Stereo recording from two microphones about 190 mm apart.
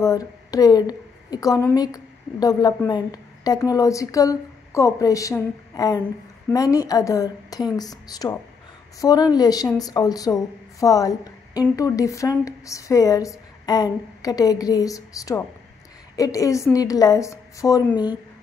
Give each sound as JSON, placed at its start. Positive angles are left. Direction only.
{"t": 0.0, "sound": "a woman's voice", "side_deg": 20}